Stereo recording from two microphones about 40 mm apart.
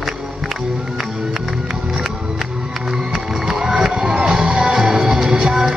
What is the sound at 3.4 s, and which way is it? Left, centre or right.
Music, centre.